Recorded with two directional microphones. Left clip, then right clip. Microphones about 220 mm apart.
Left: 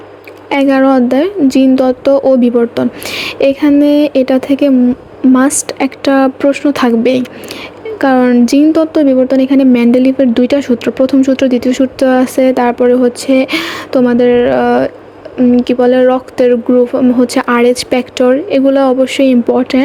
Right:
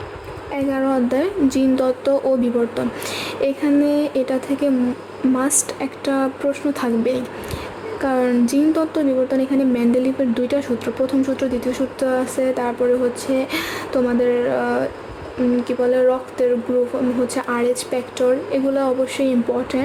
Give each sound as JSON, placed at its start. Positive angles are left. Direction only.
{"t": 0.5, "sound": "a woman's voice", "side_deg": 30}